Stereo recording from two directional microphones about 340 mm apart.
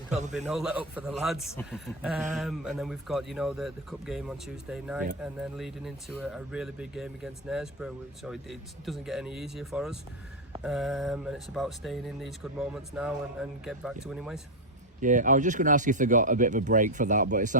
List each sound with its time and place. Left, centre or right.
0.3 s speech: centre
15.0 s speech: right